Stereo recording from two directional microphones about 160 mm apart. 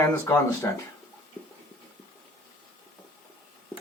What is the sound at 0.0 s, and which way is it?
Speech, 20° left (ahead or behind).